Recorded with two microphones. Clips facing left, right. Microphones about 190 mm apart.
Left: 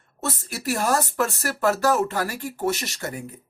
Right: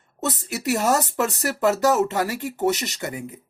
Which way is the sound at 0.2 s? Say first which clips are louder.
Right 3 dB; 20° right (ahead or behind).